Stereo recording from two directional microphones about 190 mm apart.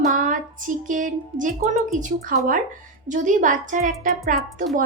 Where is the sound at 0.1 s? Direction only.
45° right (ahead or behind).